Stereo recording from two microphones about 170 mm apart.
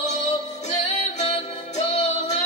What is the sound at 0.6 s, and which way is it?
Music, 40° left (ahead or behind).